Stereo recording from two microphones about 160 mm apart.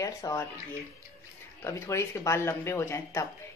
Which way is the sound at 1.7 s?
15° left (ahead or behind).